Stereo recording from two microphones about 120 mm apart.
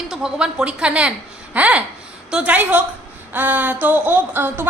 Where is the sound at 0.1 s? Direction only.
5° right (ahead or behind).